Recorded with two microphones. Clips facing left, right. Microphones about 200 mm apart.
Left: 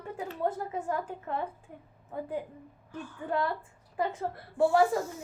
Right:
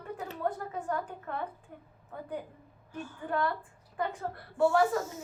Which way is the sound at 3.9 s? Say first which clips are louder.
Left 3 dB; 25° left (ahead or behind).